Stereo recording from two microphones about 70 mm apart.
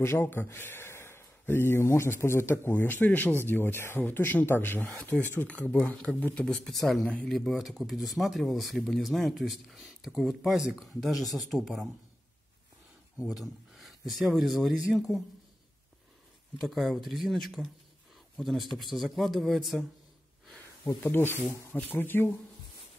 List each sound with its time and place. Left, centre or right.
0.0 s a man's voice: left
6.4 s speech: centre
13.4 s speech: centre
16.6 s speech: centre
18.7 s speech: centre
20.8 s speech: left